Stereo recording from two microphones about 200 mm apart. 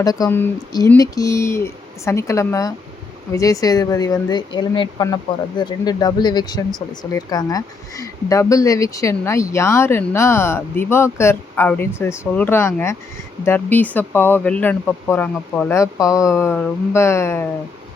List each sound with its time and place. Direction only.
0.0 s speech: 20° left (ahead or behind)